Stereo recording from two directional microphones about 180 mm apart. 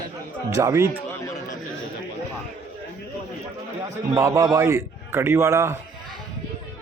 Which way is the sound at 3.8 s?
20° right (ahead or behind).